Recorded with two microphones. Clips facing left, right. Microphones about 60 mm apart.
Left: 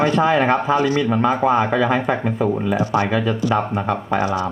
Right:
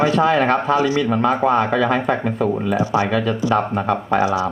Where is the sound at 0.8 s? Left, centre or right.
Centre.